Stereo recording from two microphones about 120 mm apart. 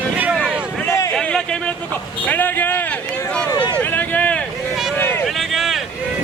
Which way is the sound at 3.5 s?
35° left (ahead or behind).